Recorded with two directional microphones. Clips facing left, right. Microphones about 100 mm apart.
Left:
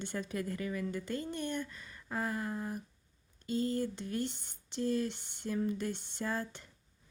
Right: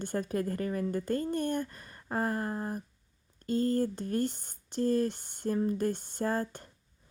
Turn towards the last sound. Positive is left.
turn(degrees=-45)  # may be behind; listen again after turning